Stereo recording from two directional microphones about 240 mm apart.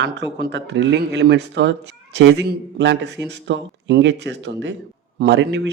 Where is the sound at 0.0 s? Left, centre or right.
Right.